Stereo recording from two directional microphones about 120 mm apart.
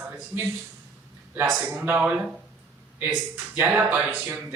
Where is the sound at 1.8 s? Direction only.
10° right (ahead or behind).